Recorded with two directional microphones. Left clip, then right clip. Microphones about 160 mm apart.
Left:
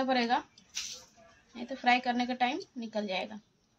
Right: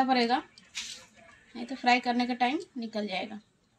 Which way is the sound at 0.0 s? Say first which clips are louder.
Right 3 dB; 20° left (ahead or behind).